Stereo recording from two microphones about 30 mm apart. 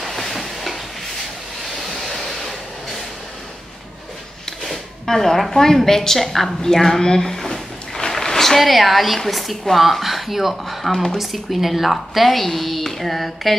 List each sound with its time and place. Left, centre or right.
0.0 s a sound: centre
1.8 s vehicle: centre
4.6 s a woman's voice: centre
10.9 s speech: centre
11.6 s a woman's voice: centre